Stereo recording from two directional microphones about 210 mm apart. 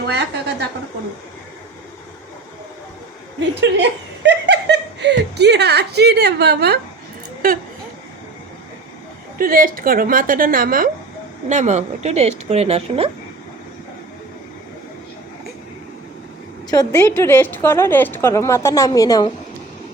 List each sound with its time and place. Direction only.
0.1 s a sound: 50° right (ahead or behind)
3.5 s a woman's voice: 55° right (ahead or behind)
9.4 s a woman's voice: 40° right (ahead or behind)
16.6 s a woman's voice: 15° left (ahead or behind)